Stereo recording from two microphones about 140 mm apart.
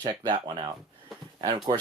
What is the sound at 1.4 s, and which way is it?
Speech, 30° right (ahead or behind).